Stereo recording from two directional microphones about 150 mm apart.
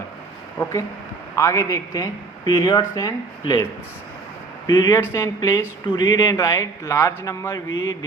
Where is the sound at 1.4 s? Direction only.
20° left (ahead or behind).